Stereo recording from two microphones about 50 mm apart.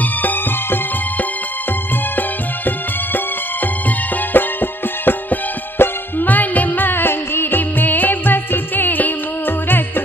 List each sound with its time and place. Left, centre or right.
0.2 s music: left
4.3 s music: left